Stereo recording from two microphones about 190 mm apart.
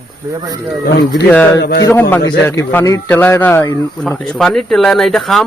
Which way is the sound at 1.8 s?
10° left (ahead or behind).